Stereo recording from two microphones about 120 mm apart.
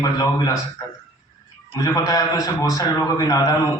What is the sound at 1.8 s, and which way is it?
A man's voice, 30° left (ahead or behind).